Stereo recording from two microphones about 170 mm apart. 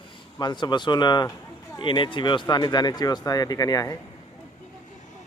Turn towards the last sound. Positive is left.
turn(degrees=20)  # may be behind; listen again after turning